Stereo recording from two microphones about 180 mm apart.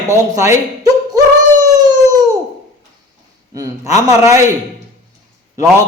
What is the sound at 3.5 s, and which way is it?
Speech, 20° right (ahead or behind).